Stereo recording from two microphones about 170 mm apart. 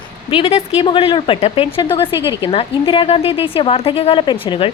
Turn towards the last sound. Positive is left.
turn(degrees=30)  # may be behind; listen again after turning